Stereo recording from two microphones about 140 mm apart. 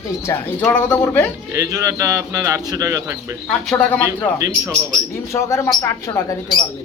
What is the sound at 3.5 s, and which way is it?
Speech, 5° left (ahead or behind).